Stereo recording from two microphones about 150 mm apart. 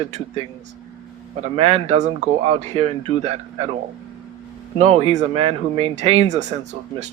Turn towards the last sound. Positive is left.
turn(degrees=-50)  # may be behind; listen again after turning